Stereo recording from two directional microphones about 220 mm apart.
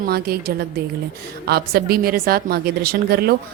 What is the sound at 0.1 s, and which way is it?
Speech, 45° right (ahead or behind).